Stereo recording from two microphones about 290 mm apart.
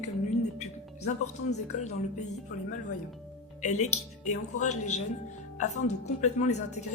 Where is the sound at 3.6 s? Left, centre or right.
Left.